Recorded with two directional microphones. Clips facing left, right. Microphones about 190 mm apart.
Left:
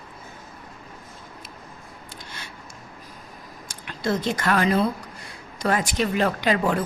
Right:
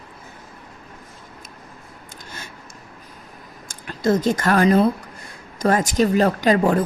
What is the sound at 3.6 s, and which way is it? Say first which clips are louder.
A woman's voice: right 6 dB; 45° right (ahead or behind).